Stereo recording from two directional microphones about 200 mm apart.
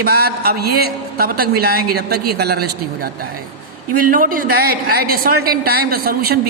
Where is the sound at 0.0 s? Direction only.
50° right (ahead or behind).